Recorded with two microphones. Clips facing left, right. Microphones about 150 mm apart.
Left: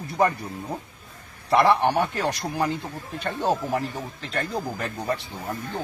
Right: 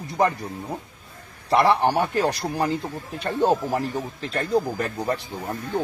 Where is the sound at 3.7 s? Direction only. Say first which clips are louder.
Right 2 dB; 35° right (ahead or behind).